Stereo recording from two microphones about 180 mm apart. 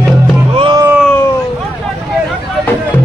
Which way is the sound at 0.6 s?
25° right (ahead or behind).